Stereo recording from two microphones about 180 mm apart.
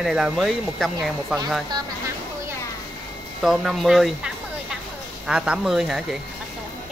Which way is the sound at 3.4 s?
Centre (ahead or behind).